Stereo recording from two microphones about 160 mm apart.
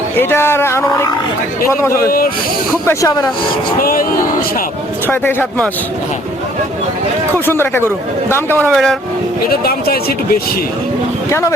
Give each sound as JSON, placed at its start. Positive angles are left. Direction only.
{"t": 0.2, "sound": "speech", "side_deg": 15}
{"t": 2.0, "sound": "speech", "side_deg": 65}
{"t": 2.8, "sound": "speech", "side_deg": 20}
{"t": 5.0, "sound": "speech", "side_deg": 10}
{"t": 7.4, "sound": "speech", "side_deg": 15}
{"t": 8.7, "sound": "speech", "side_deg": 0}
{"t": 9.6, "sound": "speech", "side_deg": 70}